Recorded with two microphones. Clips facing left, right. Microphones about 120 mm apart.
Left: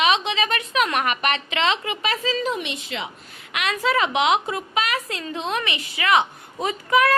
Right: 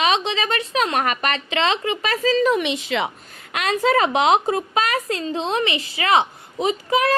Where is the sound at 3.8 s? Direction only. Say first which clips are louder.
Right 3 dB; 40° right (ahead or behind).